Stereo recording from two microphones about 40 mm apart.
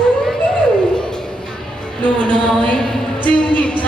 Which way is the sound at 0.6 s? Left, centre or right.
Left.